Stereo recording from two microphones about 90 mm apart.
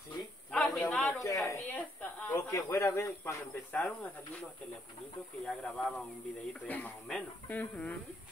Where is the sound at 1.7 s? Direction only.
15° left (ahead or behind).